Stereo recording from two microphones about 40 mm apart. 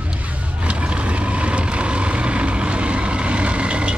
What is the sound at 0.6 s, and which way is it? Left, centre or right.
Vehicle, right.